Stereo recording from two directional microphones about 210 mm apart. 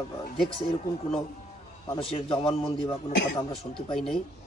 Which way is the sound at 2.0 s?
25° left (ahead or behind).